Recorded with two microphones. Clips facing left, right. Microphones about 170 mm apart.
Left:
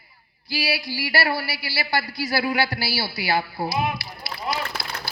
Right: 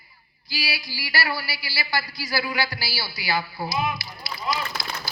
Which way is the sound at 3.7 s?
60° left (ahead or behind).